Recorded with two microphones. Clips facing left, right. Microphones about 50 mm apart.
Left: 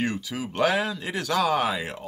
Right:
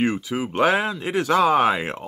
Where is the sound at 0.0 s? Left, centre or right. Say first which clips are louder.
Right 6 dB; right.